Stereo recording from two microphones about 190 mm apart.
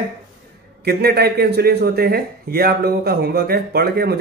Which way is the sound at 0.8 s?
55° right (ahead or behind).